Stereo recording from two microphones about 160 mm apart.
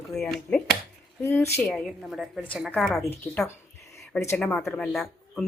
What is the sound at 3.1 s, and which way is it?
Speech, 15° left (ahead or behind).